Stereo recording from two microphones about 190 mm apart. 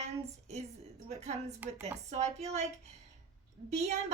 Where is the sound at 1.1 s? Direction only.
35° right (ahead or behind).